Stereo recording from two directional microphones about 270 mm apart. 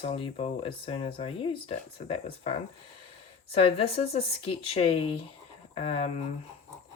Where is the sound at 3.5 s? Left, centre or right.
Left.